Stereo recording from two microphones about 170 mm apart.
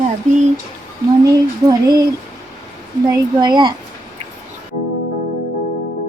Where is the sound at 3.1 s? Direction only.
25° right (ahead or behind).